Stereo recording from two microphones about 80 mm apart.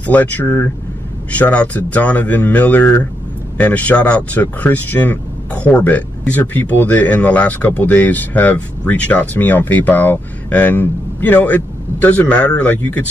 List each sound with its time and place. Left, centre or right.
0.0 s speech: centre